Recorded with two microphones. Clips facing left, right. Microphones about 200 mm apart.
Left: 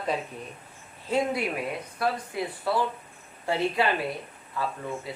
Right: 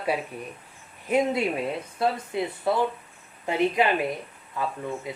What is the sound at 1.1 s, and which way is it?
A woman's voice, 20° right (ahead or behind).